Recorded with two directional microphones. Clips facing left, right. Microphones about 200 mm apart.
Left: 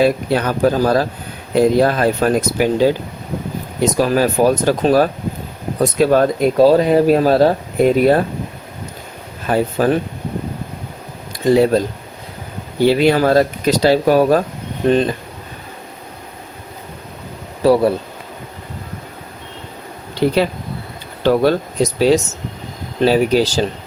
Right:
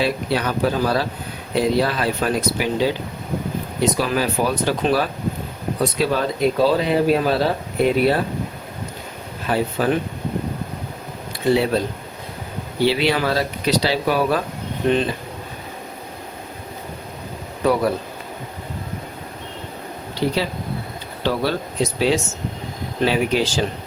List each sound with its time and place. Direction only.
0.0 s speech: 45° left (ahead or behind)
3.9 s speech: 45° left (ahead or behind)
9.5 s speech: 40° left (ahead or behind)
11.4 s speech: 45° left (ahead or behind)
12.8 s speech: 45° left (ahead or behind)
17.6 s speech: 30° left (ahead or behind)
20.2 s speech: 55° left (ahead or behind)
21.2 s speech: 45° left (ahead or behind)